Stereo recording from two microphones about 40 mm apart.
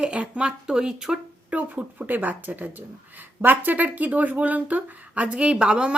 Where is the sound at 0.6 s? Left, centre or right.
Centre.